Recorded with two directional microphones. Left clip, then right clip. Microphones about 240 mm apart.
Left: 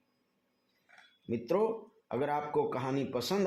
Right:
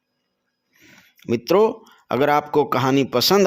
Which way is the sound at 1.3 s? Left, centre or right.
Right.